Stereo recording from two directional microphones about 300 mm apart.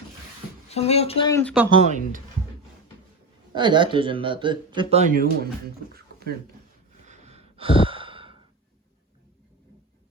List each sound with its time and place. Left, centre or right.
0.7 s speech: left
1.7 s speech: right
3.5 s speech: centre
5.9 s a sound: right
7.0 s sigh: right